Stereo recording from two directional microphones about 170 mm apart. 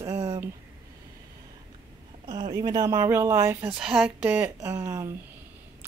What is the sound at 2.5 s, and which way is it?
Speech, 20° right (ahead or behind).